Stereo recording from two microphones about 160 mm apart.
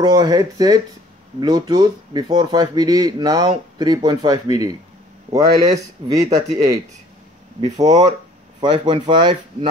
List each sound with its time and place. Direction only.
0.0 s speech: 25° right (ahead or behind)